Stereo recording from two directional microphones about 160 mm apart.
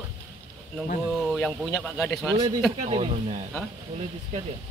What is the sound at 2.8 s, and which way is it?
Speech, 40° right (ahead or behind).